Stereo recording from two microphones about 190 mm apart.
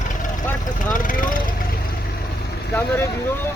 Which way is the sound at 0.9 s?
45° left (ahead or behind).